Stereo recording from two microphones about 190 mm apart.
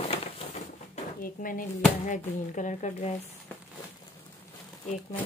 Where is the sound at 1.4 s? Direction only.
40° left (ahead or behind).